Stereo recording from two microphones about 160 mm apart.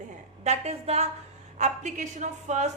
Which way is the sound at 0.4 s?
45° right (ahead or behind).